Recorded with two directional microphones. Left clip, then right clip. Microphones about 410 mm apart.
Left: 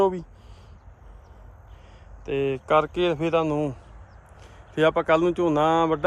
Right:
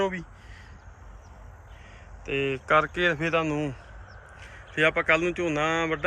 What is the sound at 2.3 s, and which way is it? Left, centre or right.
Speech, centre.